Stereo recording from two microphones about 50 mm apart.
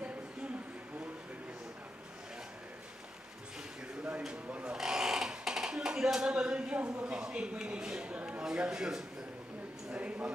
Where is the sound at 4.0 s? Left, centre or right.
Right.